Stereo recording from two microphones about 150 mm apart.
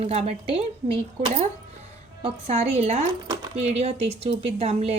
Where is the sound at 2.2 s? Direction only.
45° right (ahead or behind).